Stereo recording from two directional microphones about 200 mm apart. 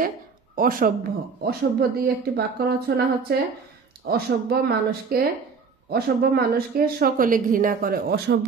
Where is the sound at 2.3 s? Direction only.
50° right (ahead or behind).